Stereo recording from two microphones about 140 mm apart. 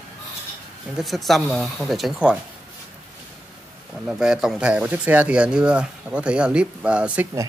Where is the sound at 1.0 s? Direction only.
Centre (ahead or behind).